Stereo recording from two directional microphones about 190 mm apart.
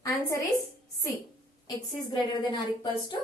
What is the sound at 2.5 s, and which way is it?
Speech, 25° left (ahead or behind).